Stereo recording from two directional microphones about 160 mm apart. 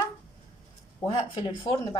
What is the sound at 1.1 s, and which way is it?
Speech, 35° left (ahead or behind).